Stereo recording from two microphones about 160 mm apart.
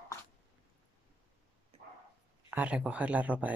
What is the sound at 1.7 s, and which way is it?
Dog, 40° right (ahead or behind).